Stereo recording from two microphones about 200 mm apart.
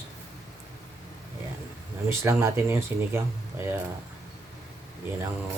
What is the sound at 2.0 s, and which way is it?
Speech, 10° right (ahead or behind).